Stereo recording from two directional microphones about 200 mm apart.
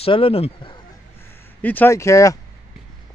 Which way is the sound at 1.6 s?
10° left (ahead or behind).